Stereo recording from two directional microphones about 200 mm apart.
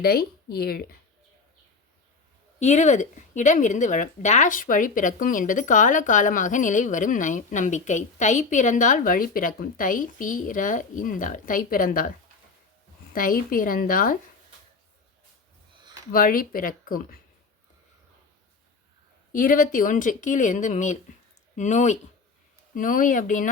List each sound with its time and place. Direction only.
0.0 s speech: 50° left (ahead or behind)
2.6 s speech: 35° left (ahead or behind)
13.1 s speech: 45° left (ahead or behind)
16.1 s speech: 45° left (ahead or behind)
19.3 s speech: 40° left (ahead or behind)